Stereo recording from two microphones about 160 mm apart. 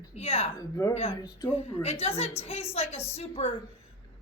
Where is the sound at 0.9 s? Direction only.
35° left (ahead or behind).